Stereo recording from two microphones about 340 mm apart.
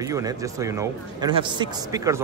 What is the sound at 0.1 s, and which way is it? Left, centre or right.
A man's voice, centre.